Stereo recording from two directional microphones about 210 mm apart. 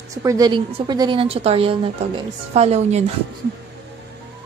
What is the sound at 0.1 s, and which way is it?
A woman's voice, 15° right (ahead or behind).